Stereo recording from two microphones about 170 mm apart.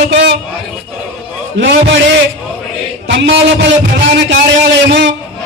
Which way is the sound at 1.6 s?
90° right.